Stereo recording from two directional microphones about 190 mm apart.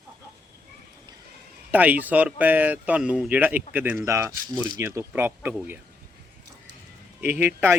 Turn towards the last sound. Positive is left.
turn(degrees=-10)  # may be behind; listen again after turning